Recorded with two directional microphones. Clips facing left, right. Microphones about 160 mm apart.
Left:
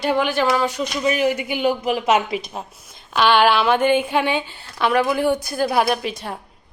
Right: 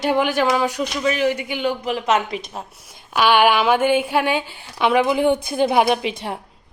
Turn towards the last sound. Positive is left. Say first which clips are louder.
# right 2 dB
turn(degrees=-20)  # may be behind; listen again after turning